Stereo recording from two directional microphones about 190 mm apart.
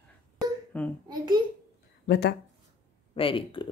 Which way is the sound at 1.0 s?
20° right (ahead or behind).